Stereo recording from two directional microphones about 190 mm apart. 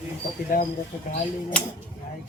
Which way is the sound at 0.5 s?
45° left (ahead or behind).